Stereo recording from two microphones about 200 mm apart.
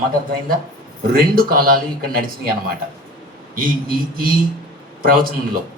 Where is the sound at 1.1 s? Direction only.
45° right (ahead or behind).